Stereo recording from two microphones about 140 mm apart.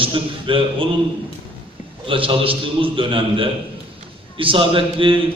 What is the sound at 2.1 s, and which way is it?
A man's voice, 40° right (ahead or behind).